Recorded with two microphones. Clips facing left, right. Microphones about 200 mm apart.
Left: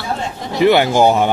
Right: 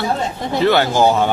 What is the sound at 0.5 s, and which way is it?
Speech, 15° left (ahead or behind).